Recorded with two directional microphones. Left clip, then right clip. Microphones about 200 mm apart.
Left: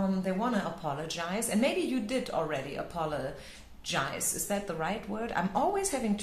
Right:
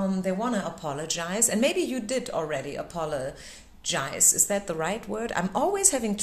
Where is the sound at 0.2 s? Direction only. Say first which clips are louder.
Right 3 dB; 45° right (ahead or behind).